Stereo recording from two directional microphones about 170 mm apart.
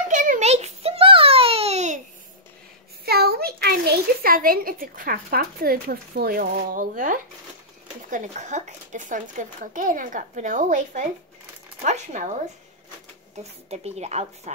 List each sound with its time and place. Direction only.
0.1 s a sound: 50° right (ahead or behind)
3.1 s a child's voice: 65° right (ahead or behind); by 12.3 s 45° right (ahead or behind)
13.4 s a woman's voice: 40° right (ahead or behind)